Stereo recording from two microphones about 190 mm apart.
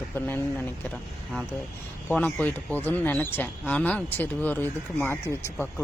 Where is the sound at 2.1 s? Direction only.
10° left (ahead or behind).